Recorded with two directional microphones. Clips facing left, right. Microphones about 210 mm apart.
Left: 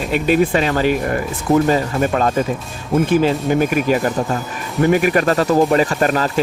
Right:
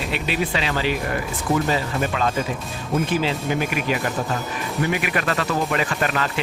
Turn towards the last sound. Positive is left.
turn(degrees=40)  # may be behind; listen again after turning